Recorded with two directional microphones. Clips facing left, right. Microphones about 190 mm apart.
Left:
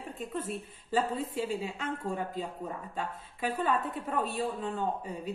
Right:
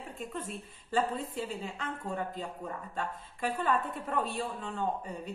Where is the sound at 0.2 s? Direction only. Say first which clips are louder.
Left 4 dB; centre (ahead or behind).